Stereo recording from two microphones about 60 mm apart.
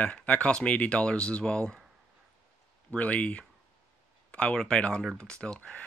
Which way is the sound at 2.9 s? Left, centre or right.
Left.